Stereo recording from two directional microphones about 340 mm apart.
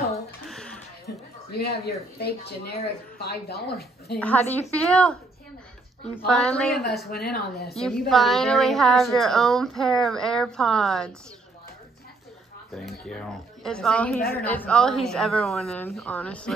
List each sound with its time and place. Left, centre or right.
1.0 s speech: left
4.2 s a woman's voice: centre
6.3 s a woman's voice: centre
7.1 s speech: left
8.1 s a woman's voice: centre
12.7 s a woman's voice: centre